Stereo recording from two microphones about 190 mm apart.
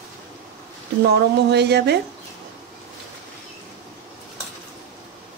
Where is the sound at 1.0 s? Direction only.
60° right (ahead or behind).